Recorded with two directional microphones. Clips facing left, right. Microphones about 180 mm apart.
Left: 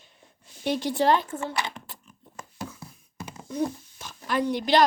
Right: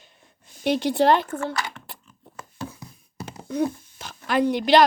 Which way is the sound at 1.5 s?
20° left (ahead or behind).